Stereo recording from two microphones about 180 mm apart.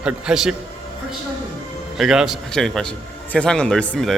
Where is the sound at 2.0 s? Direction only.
Centre (ahead or behind).